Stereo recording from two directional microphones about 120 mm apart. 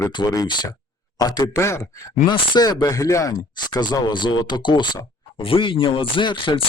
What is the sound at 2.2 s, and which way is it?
Speech, 35° left (ahead or behind).